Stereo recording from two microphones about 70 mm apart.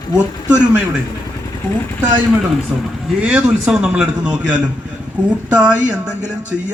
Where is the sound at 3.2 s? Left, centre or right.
Centre.